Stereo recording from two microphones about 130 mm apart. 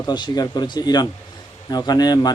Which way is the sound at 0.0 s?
35° left (ahead or behind).